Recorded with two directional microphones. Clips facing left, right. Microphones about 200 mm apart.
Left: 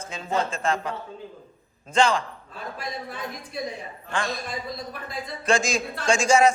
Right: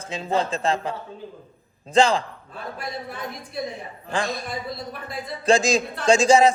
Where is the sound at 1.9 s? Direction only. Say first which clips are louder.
Right 3 dB; 35° right (ahead or behind).